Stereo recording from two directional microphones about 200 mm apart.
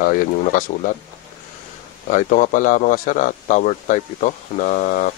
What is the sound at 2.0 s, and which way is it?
A man's voice, 40° left (ahead or behind).